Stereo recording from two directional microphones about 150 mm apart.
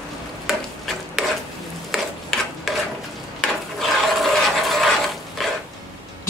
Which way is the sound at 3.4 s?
Centre (ahead or behind).